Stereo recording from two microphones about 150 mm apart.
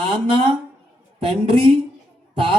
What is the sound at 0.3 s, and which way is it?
Speech, 35° right (ahead or behind).